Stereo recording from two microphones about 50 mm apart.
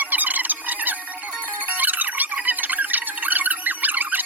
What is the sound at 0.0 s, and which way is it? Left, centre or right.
Music, right.